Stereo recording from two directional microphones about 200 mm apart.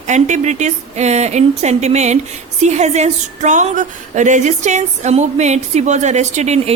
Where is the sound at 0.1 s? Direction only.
35° right (ahead or behind).